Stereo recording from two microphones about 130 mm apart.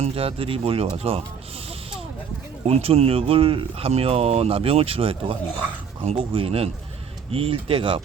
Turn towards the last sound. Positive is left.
turn(degrees=-45)  # may be behind; listen again after turning